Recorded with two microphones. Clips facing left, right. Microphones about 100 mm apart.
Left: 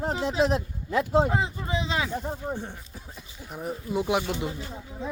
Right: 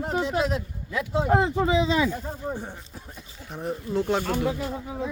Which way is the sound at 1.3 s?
65° right (ahead or behind).